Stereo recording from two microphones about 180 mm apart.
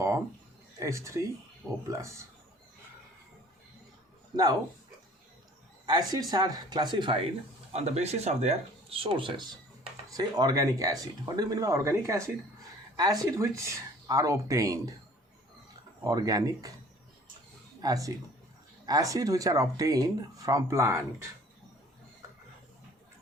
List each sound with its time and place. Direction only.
0.8 s speech: 15° right (ahead or behind)
5.8 s speech: 20° right (ahead or behind)
7.7 s speech: 35° right (ahead or behind); by 14.9 s 20° right (ahead or behind)
16.0 s speech: 20° right (ahead or behind)
17.7 s speech: 20° right (ahead or behind)